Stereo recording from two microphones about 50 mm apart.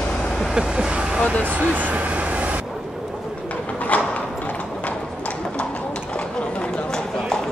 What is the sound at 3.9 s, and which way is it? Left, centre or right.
Clip-clop, left.